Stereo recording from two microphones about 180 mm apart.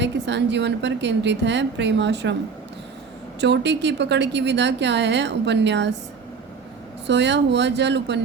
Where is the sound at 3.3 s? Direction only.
70° right (ahead or behind).